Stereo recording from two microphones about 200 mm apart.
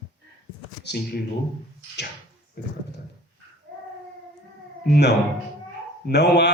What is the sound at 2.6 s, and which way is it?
Dog, 50° left (ahead or behind).